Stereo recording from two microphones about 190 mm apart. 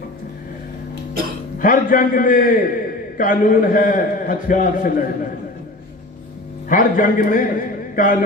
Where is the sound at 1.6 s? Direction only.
45° left (ahead or behind).